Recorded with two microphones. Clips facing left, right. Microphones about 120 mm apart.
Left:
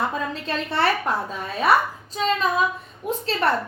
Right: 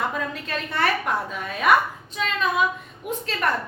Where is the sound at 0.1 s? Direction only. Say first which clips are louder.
Left 2 dB; 30° left (ahead or behind).